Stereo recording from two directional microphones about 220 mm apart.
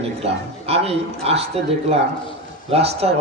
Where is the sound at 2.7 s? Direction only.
30° right (ahead or behind).